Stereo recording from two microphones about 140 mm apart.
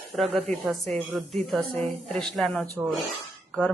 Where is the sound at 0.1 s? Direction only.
Centre (ahead or behind).